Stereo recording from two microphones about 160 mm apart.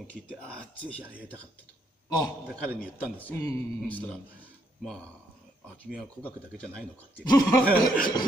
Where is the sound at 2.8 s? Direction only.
10° left (ahead or behind).